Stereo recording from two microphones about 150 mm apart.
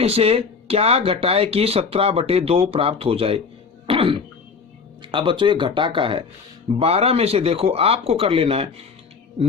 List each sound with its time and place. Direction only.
0.0 s speech: 40° right (ahead or behind)